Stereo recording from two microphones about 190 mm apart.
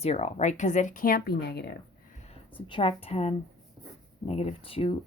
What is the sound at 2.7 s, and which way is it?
Speech, 30° left (ahead or behind).